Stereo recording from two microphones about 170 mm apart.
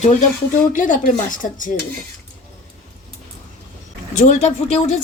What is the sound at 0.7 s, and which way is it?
A woman's voice, 50° left (ahead or behind).